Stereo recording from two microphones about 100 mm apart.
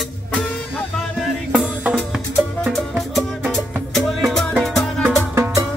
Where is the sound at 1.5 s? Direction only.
10° right (ahead or behind).